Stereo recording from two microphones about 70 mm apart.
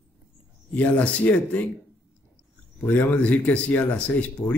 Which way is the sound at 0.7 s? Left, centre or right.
Centre.